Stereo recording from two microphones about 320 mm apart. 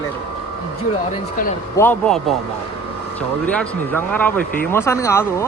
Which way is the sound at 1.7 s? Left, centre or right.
Centre.